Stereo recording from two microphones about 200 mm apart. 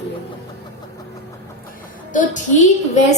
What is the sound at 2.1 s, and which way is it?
Speech, 40° left (ahead or behind).